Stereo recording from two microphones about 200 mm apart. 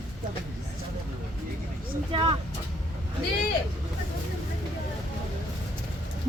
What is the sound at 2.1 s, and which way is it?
Speech, 25° right (ahead or behind).